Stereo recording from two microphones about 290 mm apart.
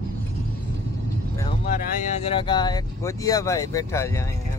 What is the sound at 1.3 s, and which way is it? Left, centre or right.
Vehicle, centre.